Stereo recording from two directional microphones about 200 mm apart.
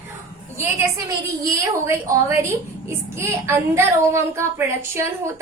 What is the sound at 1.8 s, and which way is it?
A woman's voice, 15° right (ahead or behind).